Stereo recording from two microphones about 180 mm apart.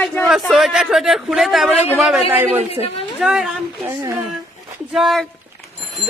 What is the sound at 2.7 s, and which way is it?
Speech, 35° left (ahead or behind).